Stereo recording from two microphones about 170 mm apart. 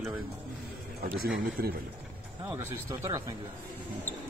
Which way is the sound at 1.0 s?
60° right (ahead or behind).